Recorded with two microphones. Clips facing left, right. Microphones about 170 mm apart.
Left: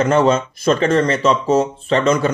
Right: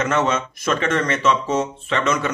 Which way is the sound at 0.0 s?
35° left (ahead or behind).